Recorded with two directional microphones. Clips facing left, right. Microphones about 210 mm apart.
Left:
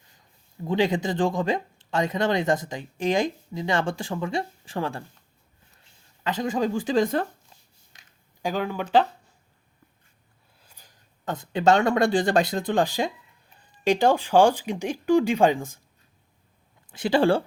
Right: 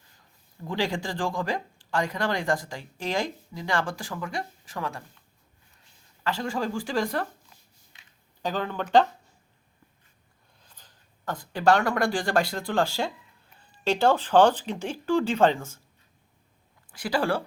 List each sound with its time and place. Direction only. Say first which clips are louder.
0.6 s speech: left 6 dB; 20° left (ahead or behind)
6.2 s a woman's voice: left 4 dB; 20° left (ahead or behind)
8.4 s speech: left 2 dB; 10° left (ahead or behind)
10.6 s a sound: left 1 dB; 10° left (ahead or behind)
11.3 s speech: left 2 dB; 20° left (ahead or behind)
16.9 s speech: left 6 dB; 25° left (ahead or behind)